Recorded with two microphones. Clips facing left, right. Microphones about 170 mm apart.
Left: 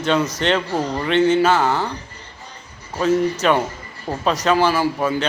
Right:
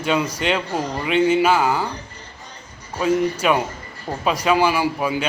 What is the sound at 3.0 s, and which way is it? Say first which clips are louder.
A man's voice: left 1 dB; 10° right (ahead or behind).